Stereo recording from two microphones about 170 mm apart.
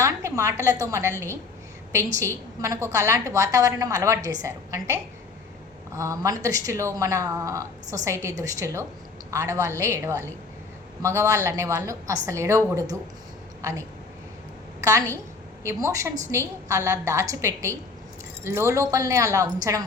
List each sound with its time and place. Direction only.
0.0 s a woman's voice: 15° right (ahead or behind)
2.1 s speech: 15° right (ahead or behind)
6.0 s a woman's voice: 20° right (ahead or behind)